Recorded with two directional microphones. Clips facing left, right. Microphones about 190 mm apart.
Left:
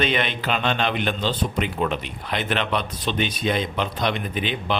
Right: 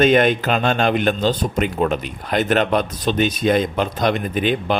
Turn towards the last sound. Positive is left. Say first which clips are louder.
# right 6 dB
turn(degrees=-45)  # may be behind; listen again after turning